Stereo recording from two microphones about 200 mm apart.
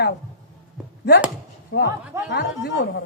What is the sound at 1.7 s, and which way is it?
Speech, 70° left (ahead or behind).